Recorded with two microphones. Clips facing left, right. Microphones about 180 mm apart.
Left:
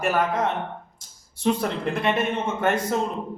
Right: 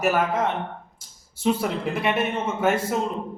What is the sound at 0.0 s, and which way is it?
Speech, 5° right (ahead or behind).